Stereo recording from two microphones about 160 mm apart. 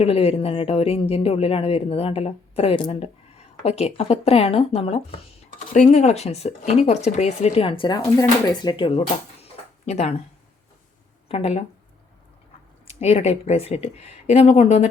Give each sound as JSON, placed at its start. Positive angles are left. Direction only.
{"t": 0.0, "sound": "a woman's voice", "side_deg": 40}
{"t": 11.3, "sound": "a woman's voice", "side_deg": 40}
{"t": 12.9, "sound": "a woman's voice", "side_deg": 40}